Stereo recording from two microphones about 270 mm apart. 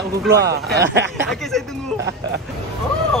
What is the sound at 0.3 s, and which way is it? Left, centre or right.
Speech, right.